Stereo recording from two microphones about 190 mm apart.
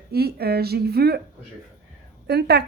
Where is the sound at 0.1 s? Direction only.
55° right (ahead or behind).